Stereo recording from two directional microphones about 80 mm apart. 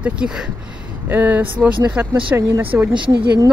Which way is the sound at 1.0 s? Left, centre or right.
Right.